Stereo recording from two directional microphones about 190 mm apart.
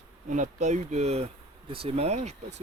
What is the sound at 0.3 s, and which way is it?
Speech, 40° right (ahead or behind).